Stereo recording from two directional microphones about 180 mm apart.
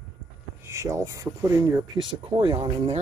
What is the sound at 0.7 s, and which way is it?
Speech, 15° right (ahead or behind).